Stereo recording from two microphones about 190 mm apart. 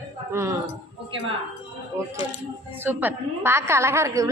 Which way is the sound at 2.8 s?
10° right (ahead or behind).